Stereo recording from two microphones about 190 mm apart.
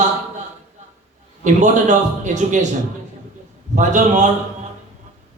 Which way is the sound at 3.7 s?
40° right (ahead or behind).